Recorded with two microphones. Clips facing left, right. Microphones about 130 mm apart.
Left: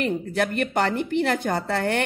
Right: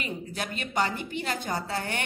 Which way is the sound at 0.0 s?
60° left (ahead or behind).